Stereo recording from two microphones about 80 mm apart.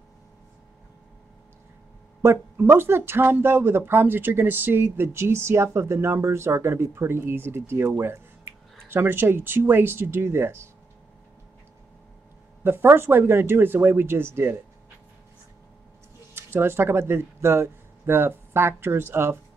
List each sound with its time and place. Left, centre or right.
2.2 s speech: right
12.6 s speech: right
16.3 s speech: right